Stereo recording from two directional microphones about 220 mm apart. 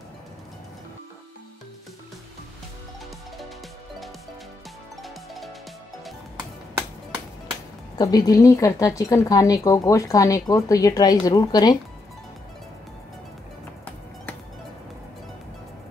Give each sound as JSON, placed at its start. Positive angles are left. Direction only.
{"t": 5.0, "sound": "music", "side_deg": 0}
{"t": 8.0, "sound": "speech", "side_deg": 15}